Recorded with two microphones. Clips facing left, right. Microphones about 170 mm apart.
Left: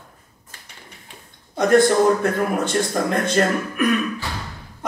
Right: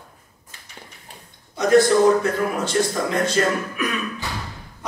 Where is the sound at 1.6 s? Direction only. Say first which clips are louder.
Even; 55° left (ahead or behind).